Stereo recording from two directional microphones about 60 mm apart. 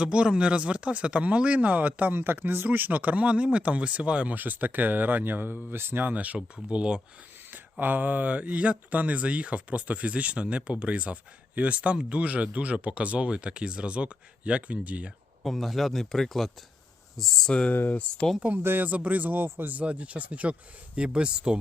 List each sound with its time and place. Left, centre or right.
0.0 s speech: centre
7.5 s speech: right
15.4 s speech: centre
17.7 s speech: left
18.4 s speech: right
19.8 s speech: right